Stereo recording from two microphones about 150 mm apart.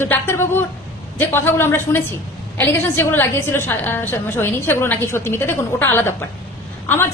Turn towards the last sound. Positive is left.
turn(degrees=15)  # may be behind; listen again after turning